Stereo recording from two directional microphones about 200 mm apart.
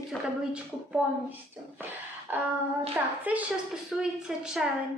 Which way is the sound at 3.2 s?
5° right (ahead or behind).